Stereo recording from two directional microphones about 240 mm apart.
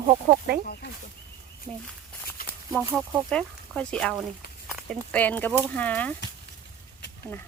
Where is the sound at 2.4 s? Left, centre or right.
Left.